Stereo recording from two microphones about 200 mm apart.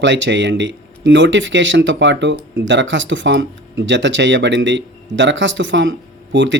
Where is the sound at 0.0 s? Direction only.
65° right (ahead or behind).